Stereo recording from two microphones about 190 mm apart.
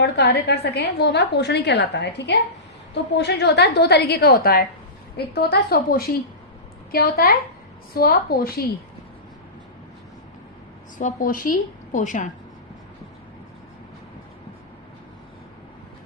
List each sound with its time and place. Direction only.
0.0 s a woman's voice: 60° left (ahead or behind)
10.9 s a woman's voice: 45° left (ahead or behind)